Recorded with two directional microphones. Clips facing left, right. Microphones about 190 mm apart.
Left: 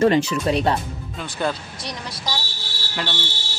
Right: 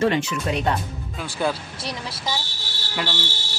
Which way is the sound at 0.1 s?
35° left (ahead or behind).